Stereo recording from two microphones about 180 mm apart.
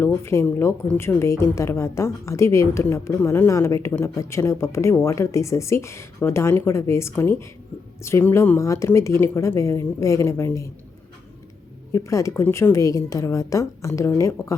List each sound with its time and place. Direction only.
0.0 s a woman's voice: 15° left (ahead or behind)
11.9 s a woman's voice: 15° left (ahead or behind)